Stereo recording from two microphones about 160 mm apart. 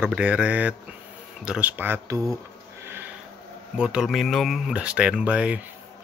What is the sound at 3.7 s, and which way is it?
A man's voice, 5° right (ahead or behind).